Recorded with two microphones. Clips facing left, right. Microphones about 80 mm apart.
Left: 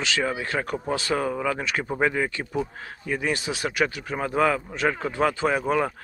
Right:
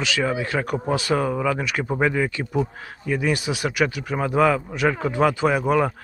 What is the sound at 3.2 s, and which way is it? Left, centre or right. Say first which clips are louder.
Speech: right 4 dB; left.